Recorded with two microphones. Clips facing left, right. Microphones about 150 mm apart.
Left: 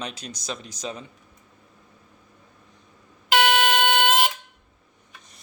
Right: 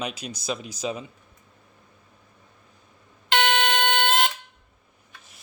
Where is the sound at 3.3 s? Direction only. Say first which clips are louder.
Left 2 dB; 10° left (ahead or behind).